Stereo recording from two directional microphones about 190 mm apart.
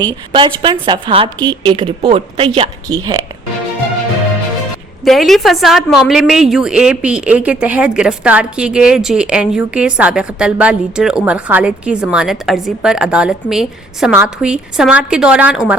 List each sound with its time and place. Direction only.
0.0 s a woman's voice: 25° right (ahead or behind)
5.0 s a woman's voice: centre (ahead or behind)